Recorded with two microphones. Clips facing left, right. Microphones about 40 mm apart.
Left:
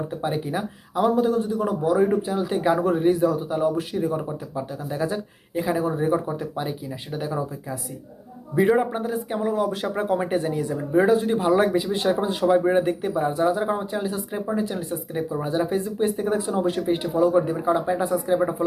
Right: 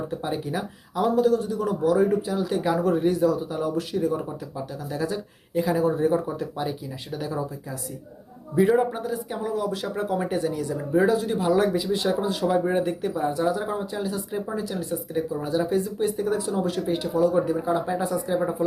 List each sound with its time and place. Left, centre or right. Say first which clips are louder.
0.1 s speech: left 2 dB; left